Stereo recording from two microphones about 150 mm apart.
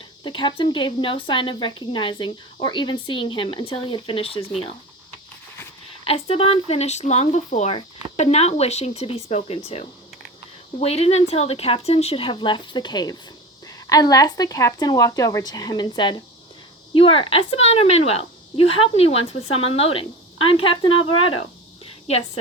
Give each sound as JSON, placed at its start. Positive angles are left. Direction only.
{"t": 0.3, "sound": "speech", "side_deg": 35}
{"t": 6.1, "sound": "speech", "side_deg": 40}